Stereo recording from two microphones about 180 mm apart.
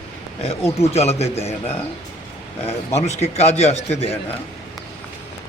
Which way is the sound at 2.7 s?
40° left (ahead or behind).